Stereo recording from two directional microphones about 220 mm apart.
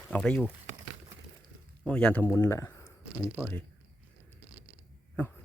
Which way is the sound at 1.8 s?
5° left (ahead or behind).